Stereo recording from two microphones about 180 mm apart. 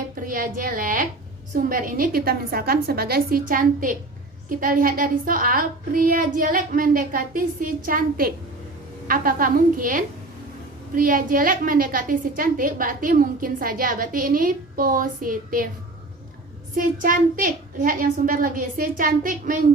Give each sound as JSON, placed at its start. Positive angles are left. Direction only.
{"t": 0.2, "sound": "a woman's voice", "side_deg": -50}
{"t": 16.7, "sound": "a woman's voice", "side_deg": -50}